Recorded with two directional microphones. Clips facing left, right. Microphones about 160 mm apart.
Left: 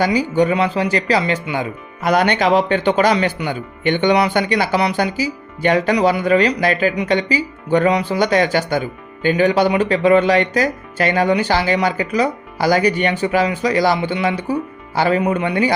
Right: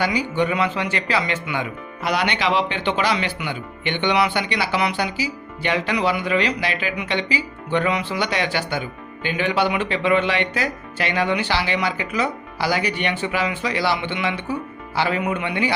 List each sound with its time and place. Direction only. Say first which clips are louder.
0.0 s a man's voice: left 6 dB; 40° left (ahead or behind)